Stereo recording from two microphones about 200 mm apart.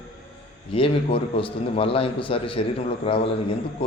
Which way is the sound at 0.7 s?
25° left (ahead or behind).